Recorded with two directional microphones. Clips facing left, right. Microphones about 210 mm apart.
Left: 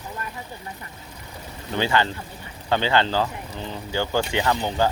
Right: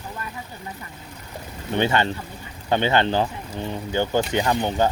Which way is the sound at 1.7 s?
20° right (ahead or behind).